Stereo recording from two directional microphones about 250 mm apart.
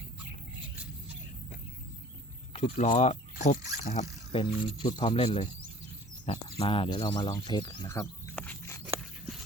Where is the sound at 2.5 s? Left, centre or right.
Left.